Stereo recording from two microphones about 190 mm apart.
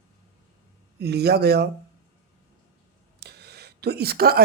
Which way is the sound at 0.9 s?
60° right (ahead or behind).